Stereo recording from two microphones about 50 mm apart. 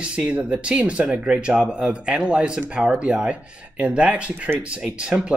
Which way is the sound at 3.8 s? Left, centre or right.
Right.